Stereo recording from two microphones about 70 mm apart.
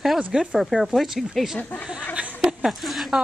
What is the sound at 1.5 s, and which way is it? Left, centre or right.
Speech, left.